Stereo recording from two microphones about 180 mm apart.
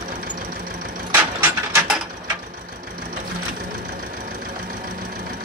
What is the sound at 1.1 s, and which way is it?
Mechanisms, 10° right (ahead or behind).